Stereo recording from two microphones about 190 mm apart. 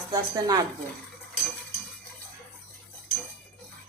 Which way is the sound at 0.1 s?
20° right (ahead or behind).